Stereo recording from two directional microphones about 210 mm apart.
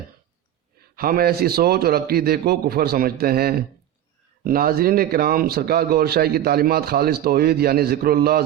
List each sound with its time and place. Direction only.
0.9 s a man's voice: 45° right (ahead or behind)